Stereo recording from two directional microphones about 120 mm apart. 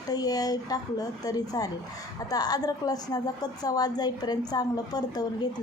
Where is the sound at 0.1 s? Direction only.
30° left (ahead or behind).